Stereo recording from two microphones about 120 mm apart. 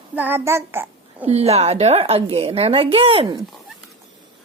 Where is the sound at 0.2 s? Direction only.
20° right (ahead or behind).